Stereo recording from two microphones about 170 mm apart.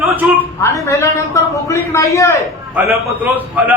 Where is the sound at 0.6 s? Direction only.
15° left (ahead or behind).